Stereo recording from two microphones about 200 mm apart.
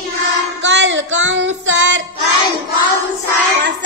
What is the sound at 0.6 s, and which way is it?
Child singing, 65° right (ahead or behind).